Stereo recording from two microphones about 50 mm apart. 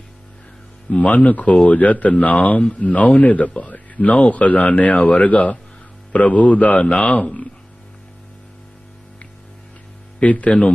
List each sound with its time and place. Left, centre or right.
0.9 s speech: left
10.2 s speech: left